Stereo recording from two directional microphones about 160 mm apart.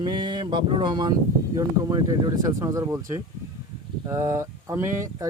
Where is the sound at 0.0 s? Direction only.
25° right (ahead or behind).